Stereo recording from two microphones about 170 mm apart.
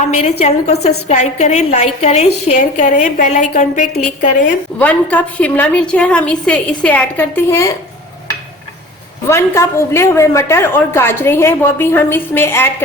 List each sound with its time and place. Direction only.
0.2 s a woman's voice: 40° left (ahead or behind)
4.8 s a woman's voice: 10° left (ahead or behind)
9.3 s a woman's voice: 15° left (ahead or behind)